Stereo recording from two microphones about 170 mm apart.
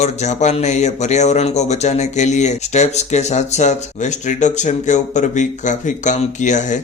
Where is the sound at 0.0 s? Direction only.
40° left (ahead or behind).